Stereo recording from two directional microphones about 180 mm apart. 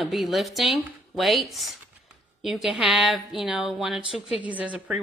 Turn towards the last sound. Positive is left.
turn(degrees=-10)  # may be behind; listen again after turning